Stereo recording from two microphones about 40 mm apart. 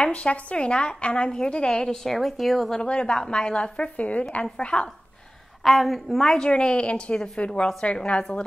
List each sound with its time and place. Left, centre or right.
0.1 s speech: left
2.0 s speech: centre
2.7 s a woman's voice: left
5.6 s speech: centre
6.2 s speech: left